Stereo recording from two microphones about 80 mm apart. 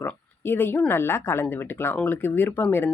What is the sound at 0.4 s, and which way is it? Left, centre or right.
Speech, left.